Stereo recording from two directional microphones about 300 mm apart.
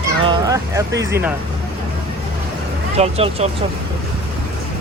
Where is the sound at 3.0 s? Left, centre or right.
Centre.